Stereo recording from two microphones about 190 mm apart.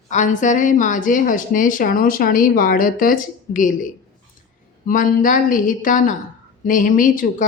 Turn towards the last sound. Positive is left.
turn(degrees=45)  # may be behind; listen again after turning